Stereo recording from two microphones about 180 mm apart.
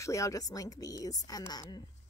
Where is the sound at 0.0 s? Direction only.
15° left (ahead or behind).